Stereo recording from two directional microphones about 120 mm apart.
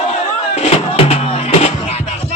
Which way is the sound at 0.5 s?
60° left (ahead or behind).